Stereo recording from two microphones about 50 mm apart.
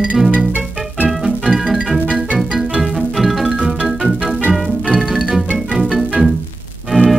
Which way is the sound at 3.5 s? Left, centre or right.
Centre.